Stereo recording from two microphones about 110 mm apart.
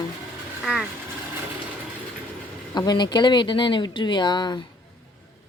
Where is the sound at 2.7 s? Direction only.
40° left (ahead or behind).